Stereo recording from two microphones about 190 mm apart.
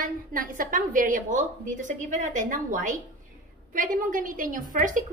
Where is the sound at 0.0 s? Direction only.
45° right (ahead or behind).